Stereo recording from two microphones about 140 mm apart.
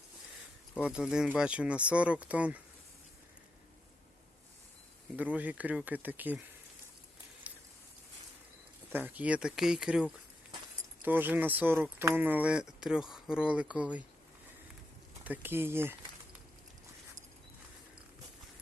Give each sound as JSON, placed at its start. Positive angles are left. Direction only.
{"t": 0.8, "sound": "speech", "side_deg": -5}
{"t": 5.1, "sound": "speech", "side_deg": -10}
{"t": 7.5, "sound": "a sound", "side_deg": -10}
{"t": 8.9, "sound": "speech", "side_deg": -15}
{"t": 15.2, "sound": "speech", "side_deg": -15}